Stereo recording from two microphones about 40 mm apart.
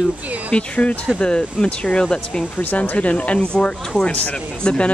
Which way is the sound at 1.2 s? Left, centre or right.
Left.